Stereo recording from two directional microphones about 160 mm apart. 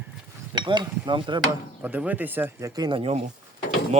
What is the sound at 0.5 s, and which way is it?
Speech, 30° right (ahead or behind).